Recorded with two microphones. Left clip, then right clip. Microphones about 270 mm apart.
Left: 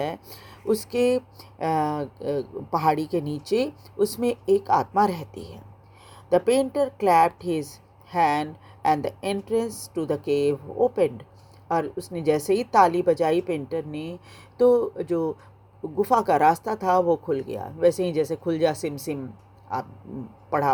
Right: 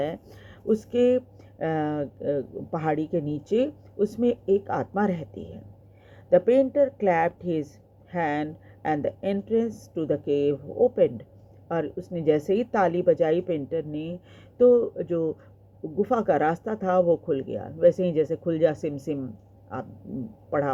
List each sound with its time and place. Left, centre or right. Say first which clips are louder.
0.0 s speech: even; left